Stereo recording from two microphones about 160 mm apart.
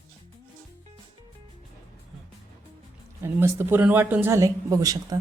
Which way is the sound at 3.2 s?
15° right (ahead or behind).